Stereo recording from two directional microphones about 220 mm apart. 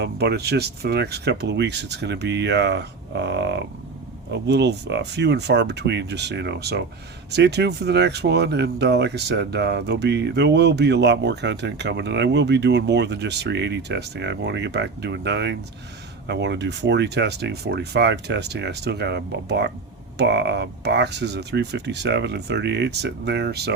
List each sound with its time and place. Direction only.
0.0 s speech: 50° right (ahead or behind)